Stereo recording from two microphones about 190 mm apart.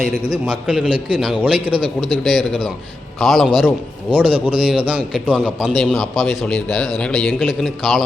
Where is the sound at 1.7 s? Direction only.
25° right (ahead or behind).